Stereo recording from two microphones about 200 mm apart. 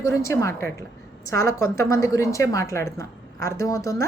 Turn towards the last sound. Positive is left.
turn(degrees=15)  # may be behind; listen again after turning